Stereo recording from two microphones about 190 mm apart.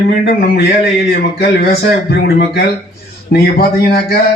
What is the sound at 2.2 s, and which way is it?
A man's voice, 60° left (ahead or behind).